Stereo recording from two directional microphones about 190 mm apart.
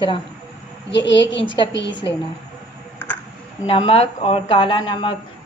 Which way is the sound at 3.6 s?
30° left (ahead or behind).